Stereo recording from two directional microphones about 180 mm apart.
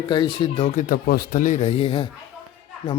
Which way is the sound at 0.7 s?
50° left (ahead or behind).